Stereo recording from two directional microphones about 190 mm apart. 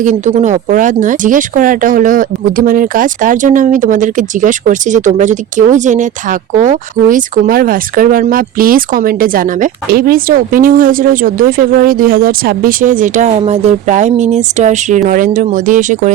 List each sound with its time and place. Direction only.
0.0 s speech: 40° right (ahead or behind)